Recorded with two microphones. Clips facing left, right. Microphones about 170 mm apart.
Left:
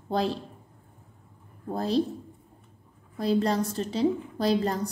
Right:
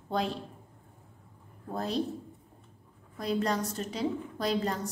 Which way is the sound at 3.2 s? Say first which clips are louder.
Left 5 dB; 30° left (ahead or behind).